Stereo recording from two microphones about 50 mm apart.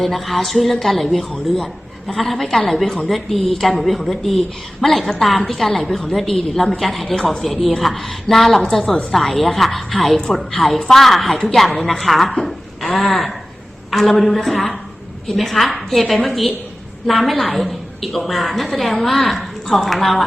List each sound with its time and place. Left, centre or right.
0.0 s a woman's voice: centre
8.8 s a woman's voice: centre
9.1 s a woman's voice: centre